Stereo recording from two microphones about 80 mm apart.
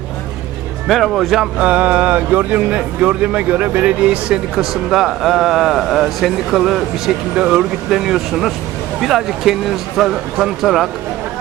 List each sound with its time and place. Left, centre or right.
0.9 s speech: centre
1.5 s speech: centre